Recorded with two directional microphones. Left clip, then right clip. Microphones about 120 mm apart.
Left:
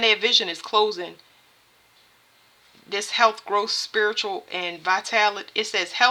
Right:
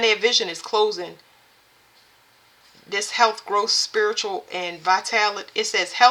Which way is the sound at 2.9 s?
35° left (ahead or behind).